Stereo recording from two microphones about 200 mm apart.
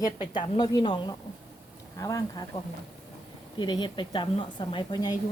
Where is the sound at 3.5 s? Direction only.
25° left (ahead or behind).